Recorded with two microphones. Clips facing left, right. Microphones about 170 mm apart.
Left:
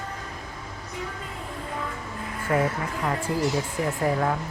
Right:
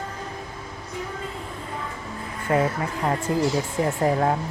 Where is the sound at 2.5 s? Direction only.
25° right (ahead or behind).